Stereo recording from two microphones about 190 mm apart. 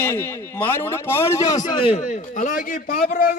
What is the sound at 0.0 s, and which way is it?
A man's voice, 10° left (ahead or behind).